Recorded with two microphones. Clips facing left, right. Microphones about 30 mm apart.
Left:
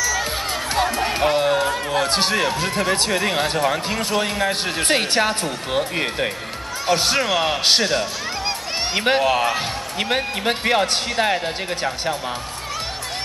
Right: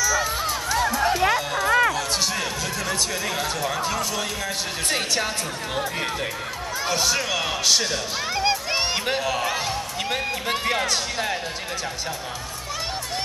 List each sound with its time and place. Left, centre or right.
0.7 s music: left
1.3 s a sound: left
1.7 s a sound: right
2.0 s speech: left
6.9 s speech: left
8.4 s music: centre
8.9 s speech: left